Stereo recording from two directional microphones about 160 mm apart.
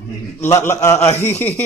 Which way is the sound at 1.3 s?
45° left (ahead or behind).